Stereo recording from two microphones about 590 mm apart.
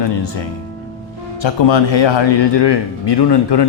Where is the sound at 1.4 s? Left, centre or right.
Left.